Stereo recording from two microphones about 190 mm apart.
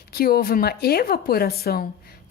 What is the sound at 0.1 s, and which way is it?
A woman's voice, 55° left (ahead or behind).